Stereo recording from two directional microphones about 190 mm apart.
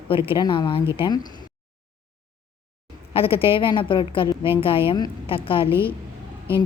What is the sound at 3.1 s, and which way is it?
A woman's voice, 30° left (ahead or behind).